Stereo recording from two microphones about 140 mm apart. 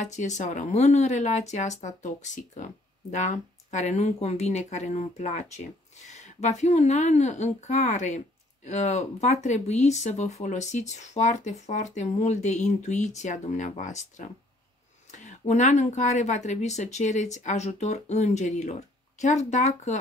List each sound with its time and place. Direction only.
0.0 s speech: 55° left (ahead or behind)